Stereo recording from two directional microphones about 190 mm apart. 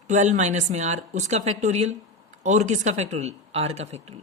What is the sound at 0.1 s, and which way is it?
Speech, 40° right (ahead or behind).